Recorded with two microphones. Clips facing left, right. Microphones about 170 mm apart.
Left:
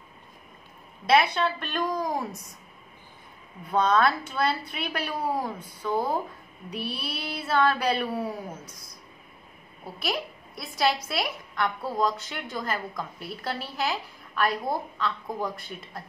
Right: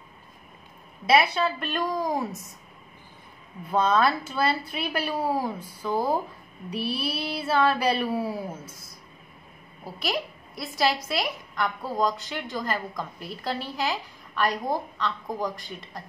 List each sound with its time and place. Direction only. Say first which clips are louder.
1.0 s a woman's voice: even; 5° right (ahead or behind)
3.7 s a woman's voice: even; 5° right (ahead or behind)
6.8 s child singing: right 5 dB; 30° right (ahead or behind)
7.2 s a woman's voice: even; 10° right (ahead or behind)
9.9 s a woman's voice: right 1 dB; centre (ahead or behind)